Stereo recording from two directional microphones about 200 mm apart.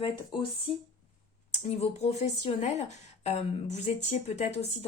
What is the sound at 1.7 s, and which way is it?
Speech, 30° left (ahead or behind).